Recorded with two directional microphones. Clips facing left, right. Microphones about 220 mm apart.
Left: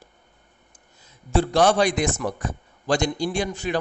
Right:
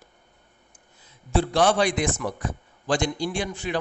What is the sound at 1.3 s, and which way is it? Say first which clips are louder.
A man's voice: left 2 dB; 45° left (ahead or behind).